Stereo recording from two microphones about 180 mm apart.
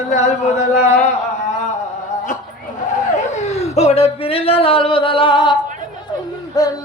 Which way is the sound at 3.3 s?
40° left (ahead or behind).